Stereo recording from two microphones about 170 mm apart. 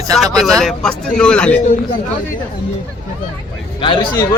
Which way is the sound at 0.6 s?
5° left (ahead or behind).